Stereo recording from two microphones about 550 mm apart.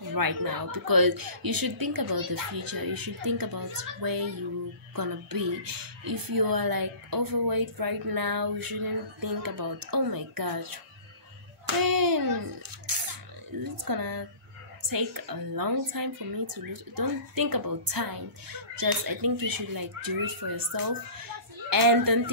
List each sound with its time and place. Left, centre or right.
0.1 s a child's voice: right